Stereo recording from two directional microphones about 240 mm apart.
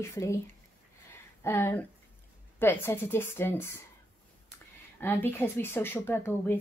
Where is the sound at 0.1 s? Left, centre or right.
Centre.